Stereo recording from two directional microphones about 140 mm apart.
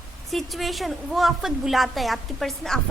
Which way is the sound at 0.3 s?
Centre (ahead or behind).